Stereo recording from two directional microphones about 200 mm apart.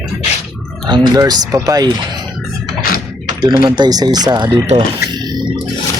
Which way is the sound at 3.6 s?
20° right (ahead or behind).